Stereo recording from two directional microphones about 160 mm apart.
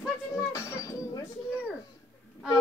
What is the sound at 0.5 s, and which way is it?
Music, 20° left (ahead or behind).